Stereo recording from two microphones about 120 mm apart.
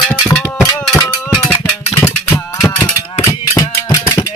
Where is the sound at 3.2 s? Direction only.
25° left (ahead or behind).